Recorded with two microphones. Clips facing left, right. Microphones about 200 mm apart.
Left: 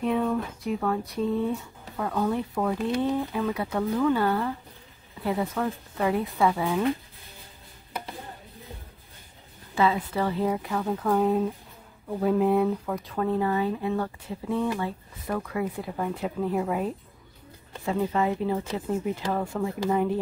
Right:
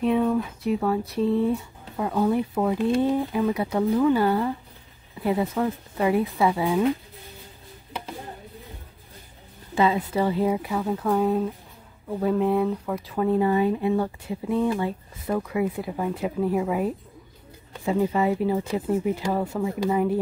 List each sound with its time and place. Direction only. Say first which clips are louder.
0.1 s speech: right 4 dB; 5° right (ahead or behind)
9.8 s speech: right 3 dB; 15° right (ahead or behind)